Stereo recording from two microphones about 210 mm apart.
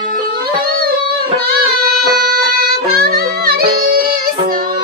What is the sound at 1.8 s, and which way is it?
Music, 45° right (ahead or behind).